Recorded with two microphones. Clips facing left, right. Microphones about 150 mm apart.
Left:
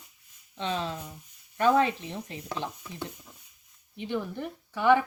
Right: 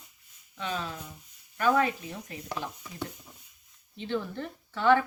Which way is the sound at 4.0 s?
15° left (ahead or behind).